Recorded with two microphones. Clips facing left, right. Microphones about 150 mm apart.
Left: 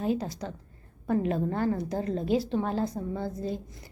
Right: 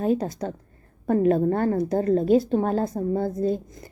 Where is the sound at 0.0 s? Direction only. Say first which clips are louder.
Right 6 dB; 50° right (ahead or behind).